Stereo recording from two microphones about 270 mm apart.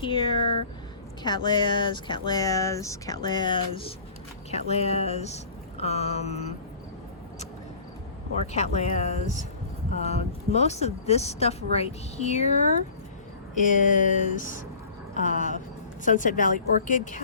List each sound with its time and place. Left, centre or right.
0.0 s speech: centre
8.5 s speech: left
13.5 s speech: left